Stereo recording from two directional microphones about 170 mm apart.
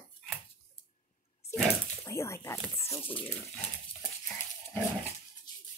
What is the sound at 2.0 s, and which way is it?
Speech, 15° left (ahead or behind).